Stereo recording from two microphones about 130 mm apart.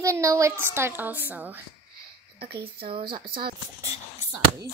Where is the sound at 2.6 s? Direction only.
45° right (ahead or behind).